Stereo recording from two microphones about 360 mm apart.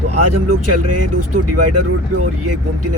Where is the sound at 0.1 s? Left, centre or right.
Right.